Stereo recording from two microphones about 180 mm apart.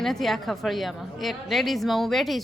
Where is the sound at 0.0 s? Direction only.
Centre (ahead or behind).